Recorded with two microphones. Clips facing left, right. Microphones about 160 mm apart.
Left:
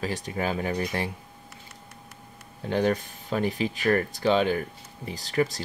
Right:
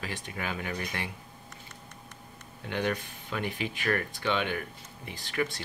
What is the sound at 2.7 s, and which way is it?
Speech, 40° left (ahead or behind).